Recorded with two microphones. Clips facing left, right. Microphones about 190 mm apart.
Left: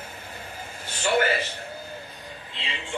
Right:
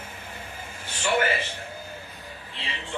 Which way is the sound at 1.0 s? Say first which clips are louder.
Left 2 dB; 35° left (ahead or behind).